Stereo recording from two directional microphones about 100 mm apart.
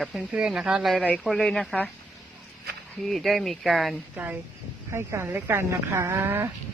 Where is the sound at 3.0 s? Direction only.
Centre (ahead or behind).